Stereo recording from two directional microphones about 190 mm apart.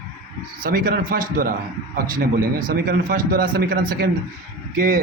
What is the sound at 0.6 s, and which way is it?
A man's voice, 50° right (ahead or behind).